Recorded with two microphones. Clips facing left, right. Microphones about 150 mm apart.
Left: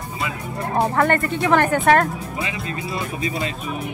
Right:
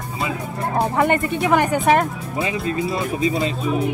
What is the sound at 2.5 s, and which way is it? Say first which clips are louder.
Speech: right 6 dB; centre (ahead or behind).